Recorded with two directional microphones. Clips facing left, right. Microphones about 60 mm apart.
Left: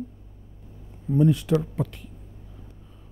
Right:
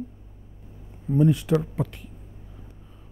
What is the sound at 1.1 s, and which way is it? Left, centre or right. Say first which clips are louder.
Speech: even; right.